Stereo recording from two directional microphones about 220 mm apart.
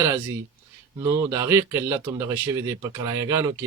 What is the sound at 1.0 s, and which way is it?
A man's voice, 15° right (ahead or behind).